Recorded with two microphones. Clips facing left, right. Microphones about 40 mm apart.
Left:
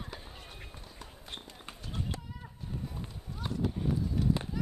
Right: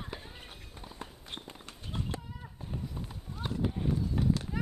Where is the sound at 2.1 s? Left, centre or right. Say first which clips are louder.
Right 3 dB; right.